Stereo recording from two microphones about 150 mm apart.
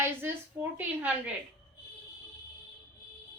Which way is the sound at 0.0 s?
15° right (ahead or behind).